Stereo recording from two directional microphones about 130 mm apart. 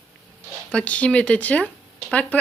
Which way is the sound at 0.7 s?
10° left (ahead or behind).